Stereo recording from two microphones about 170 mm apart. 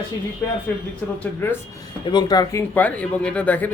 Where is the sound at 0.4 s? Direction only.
10° left (ahead or behind).